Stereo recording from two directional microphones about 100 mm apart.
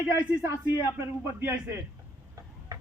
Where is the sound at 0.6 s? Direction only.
20° right (ahead or behind).